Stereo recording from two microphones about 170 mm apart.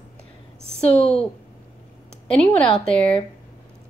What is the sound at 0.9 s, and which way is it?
Speech, 35° left (ahead or behind).